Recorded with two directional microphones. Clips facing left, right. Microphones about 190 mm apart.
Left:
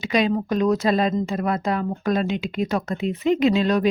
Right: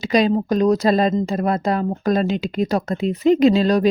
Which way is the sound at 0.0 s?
35° right (ahead or behind).